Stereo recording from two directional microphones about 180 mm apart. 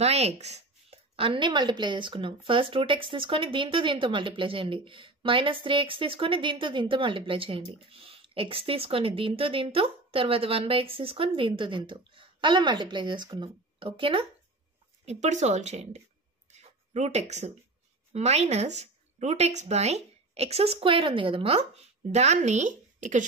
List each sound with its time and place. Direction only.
0.0 s a woman's voice: 35° right (ahead or behind)
15.0 s speech: 40° right (ahead or behind)
16.4 s a sound: 40° right (ahead or behind)
18.1 s speech: 35° right (ahead or behind)